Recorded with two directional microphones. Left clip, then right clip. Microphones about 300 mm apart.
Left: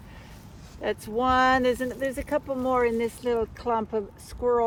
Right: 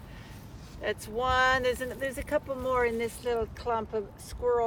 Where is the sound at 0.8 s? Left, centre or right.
Centre.